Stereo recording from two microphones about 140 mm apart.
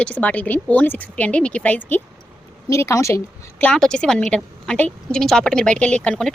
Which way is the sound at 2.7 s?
20° left (ahead or behind).